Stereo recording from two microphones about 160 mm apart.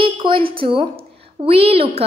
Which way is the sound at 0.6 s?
35° right (ahead or behind).